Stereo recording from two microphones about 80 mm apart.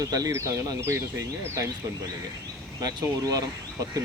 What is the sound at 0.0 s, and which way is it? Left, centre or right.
Speech, right.